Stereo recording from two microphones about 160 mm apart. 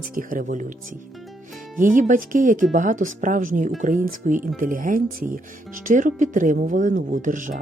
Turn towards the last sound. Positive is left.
turn(degrees=-55)  # may be behind; listen again after turning